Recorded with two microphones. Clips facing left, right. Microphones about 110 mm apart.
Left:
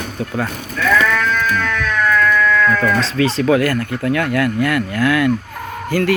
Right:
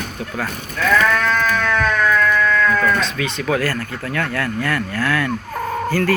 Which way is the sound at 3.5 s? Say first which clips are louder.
Left 5 dB; 20° left (ahead or behind).